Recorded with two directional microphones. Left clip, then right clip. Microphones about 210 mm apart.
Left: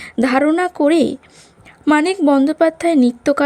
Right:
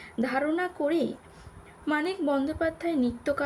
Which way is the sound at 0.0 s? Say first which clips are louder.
Left 13 dB; 50° left (ahead or behind).